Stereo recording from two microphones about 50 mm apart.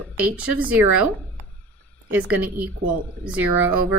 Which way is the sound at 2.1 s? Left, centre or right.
Right.